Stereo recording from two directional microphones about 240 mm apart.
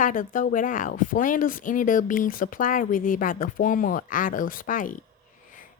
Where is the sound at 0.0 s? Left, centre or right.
Left.